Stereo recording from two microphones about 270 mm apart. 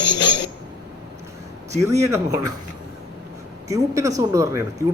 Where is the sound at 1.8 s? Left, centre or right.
Centre.